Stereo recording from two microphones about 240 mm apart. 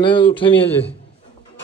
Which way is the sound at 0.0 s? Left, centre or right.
Left.